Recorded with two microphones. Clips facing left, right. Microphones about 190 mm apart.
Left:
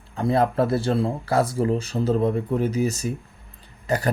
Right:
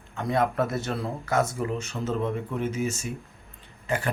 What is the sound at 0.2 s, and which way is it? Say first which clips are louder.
A man's voice: left 4 dB; 30° left (ahead or behind).